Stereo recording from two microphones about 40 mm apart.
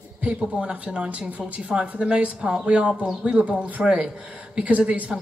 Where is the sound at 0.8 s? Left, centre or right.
Right.